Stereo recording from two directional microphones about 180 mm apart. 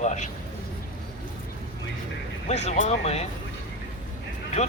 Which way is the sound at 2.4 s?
40° left (ahead or behind).